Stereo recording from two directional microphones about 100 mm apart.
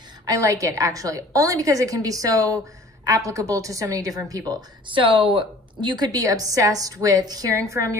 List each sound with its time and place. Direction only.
0.2 s a woman's voice: 35° right (ahead or behind)